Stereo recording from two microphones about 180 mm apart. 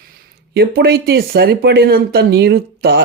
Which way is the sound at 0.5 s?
60° right (ahead or behind).